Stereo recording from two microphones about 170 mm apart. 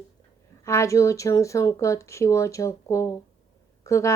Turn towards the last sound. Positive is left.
turn(degrees=15)  # may be behind; listen again after turning